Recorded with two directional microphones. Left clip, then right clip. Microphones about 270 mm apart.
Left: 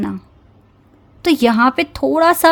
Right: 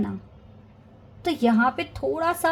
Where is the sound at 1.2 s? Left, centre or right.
Left.